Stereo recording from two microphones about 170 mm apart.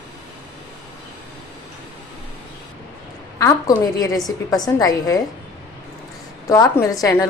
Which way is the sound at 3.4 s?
20° left (ahead or behind).